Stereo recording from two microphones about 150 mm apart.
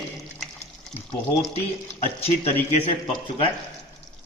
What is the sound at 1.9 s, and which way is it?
A man's voice, 40° left (ahead or behind).